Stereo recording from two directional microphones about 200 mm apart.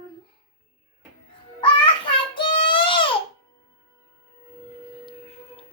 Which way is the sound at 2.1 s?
25° left (ahead or behind).